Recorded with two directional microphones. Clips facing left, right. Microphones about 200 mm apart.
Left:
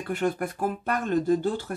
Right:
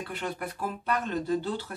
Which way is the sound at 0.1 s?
50° left (ahead or behind).